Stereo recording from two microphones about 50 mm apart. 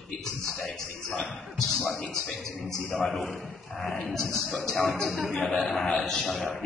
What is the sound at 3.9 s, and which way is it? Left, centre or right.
A man's voice, centre.